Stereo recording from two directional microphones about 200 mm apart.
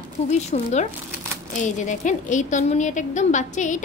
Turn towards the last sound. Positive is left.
turn(degrees=40)  # may be behind; listen again after turning